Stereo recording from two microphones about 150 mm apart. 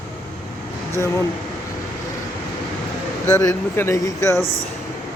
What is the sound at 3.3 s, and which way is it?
Speech, 20° left (ahead or behind).